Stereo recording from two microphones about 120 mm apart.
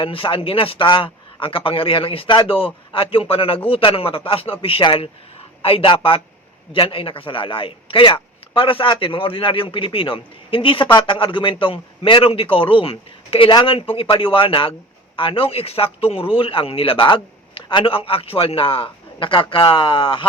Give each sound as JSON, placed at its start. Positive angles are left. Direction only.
{"t": 0.0, "sound": "a man's voice", "side_deg": 45}